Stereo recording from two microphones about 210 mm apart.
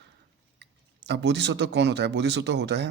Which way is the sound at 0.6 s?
55° right (ahead or behind).